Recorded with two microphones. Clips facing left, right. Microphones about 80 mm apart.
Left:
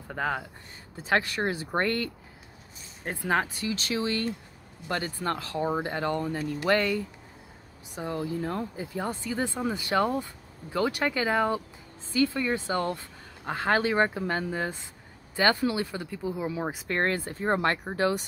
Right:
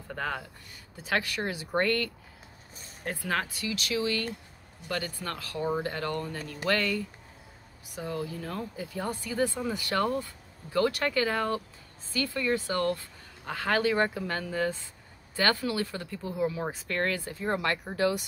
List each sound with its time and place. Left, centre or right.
0.1 s speech: centre
0.9 s speech: left
3.1 s speech: left
16.9 s speech: left